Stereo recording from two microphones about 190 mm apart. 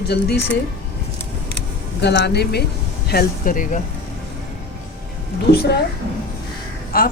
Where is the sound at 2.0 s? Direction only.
60° left (ahead or behind); by 3.8 s 45° left (ahead or behind).